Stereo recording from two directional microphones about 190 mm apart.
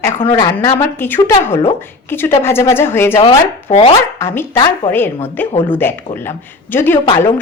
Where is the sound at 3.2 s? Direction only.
30° left (ahead or behind).